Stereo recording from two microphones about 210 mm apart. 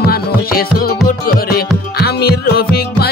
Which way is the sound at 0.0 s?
45° left (ahead or behind).